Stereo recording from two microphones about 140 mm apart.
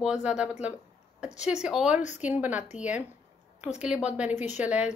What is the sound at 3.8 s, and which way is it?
Speech, 5° right (ahead or behind).